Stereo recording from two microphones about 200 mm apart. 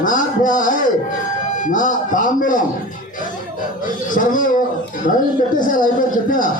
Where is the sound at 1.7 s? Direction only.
40° left (ahead or behind).